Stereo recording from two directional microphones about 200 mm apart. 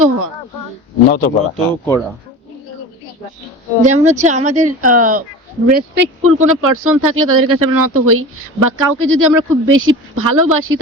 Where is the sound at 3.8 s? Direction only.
35° right (ahead or behind).